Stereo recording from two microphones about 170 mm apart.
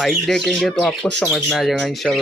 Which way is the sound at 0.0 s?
Centre (ahead or behind).